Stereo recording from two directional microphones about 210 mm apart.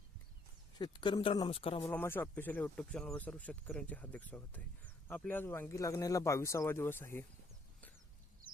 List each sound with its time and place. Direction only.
0.8 s speech: 20° left (ahead or behind)
1.8 s speech: 10° left (ahead or behind)